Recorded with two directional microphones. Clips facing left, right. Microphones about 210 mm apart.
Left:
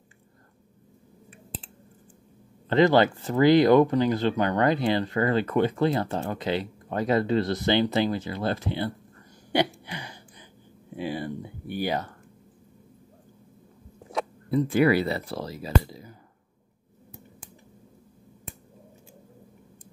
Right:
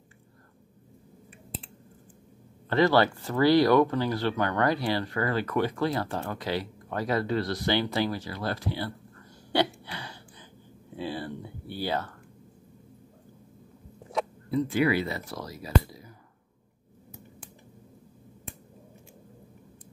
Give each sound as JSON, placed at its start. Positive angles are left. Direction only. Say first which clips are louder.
{"t": 2.7, "sound": "speech", "louder": "left 3 dB", "side_deg": 20}
{"t": 9.5, "sound": "a sound", "louder": "left 1 dB", "side_deg": 15}
{"t": 11.0, "sound": "speech", "louder": "left 3 dB", "side_deg": 15}
{"t": 15.0, "sound": "speech", "louder": "left 5 dB", "side_deg": 30}